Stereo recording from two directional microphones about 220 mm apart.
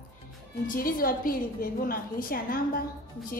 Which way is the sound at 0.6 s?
40° left (ahead or behind).